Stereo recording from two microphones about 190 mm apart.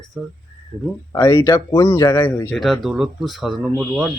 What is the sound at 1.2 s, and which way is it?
Speech, 20° left (ahead or behind).